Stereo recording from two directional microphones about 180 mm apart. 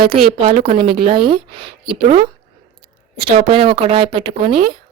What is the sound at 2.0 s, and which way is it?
Speech, 40° right (ahead or behind).